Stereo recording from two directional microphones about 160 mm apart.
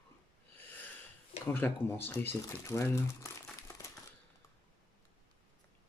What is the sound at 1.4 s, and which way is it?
Speech, 15° left (ahead or behind).